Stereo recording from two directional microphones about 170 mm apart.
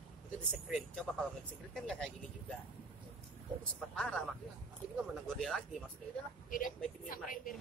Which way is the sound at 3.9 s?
5° left (ahead or behind).